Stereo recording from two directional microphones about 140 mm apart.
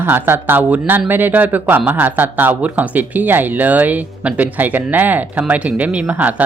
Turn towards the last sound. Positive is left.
turn(degrees=-10)  # may be behind; listen again after turning